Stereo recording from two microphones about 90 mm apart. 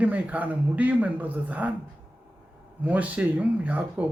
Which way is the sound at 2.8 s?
15° right (ahead or behind).